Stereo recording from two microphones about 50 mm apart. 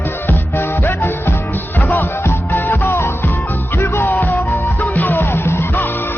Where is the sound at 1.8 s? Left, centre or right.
Left.